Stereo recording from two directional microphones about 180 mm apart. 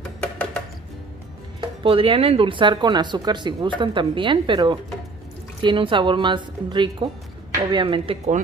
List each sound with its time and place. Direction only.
1.8 s speech: 30° right (ahead or behind)